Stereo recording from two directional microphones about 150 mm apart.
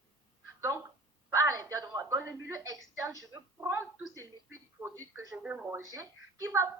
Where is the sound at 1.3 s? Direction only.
20° right (ahead or behind).